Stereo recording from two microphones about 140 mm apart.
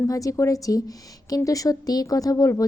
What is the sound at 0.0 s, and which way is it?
A woman's voice, 25° left (ahead or behind).